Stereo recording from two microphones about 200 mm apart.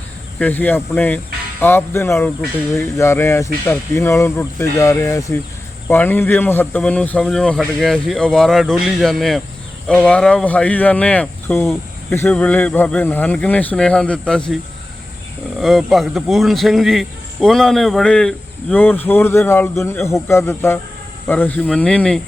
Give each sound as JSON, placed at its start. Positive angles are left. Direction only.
{"t": 0.3, "sound": "speech", "side_deg": 10}